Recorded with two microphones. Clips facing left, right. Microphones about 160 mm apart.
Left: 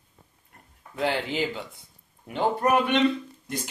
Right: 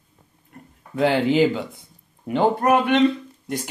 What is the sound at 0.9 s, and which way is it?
Speech, 90° right.